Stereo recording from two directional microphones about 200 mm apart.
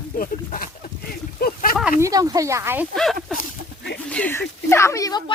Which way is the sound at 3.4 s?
55° left (ahead or behind).